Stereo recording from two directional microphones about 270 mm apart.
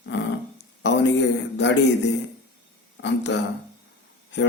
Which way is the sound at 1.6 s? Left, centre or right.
Left.